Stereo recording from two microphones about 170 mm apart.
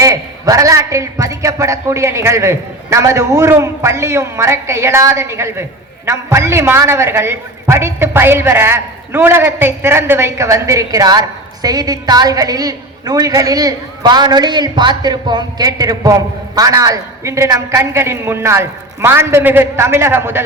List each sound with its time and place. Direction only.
0.0 s a man's voice: 20° right (ahead or behind)